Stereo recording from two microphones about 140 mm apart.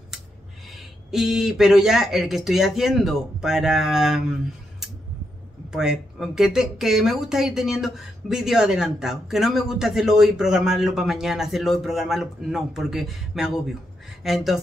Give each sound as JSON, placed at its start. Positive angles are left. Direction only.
{"t": 1.1, "sound": "speech", "side_deg": -5}
{"t": 5.7, "sound": "speech", "side_deg": -5}